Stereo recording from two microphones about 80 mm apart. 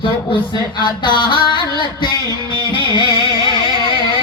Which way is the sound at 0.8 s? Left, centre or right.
Left.